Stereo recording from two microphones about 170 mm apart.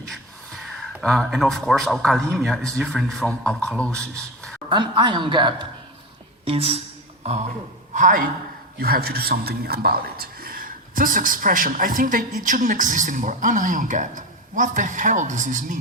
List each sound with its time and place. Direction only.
1.0 s a man's voice: 5° left (ahead or behind)
4.7 s a woman's voice: 25° right (ahead or behind)
7.9 s a man's voice: 50° right (ahead or behind)
8.8 s a man's voice: 65° right (ahead or behind); by 15.8 s 50° right (ahead or behind)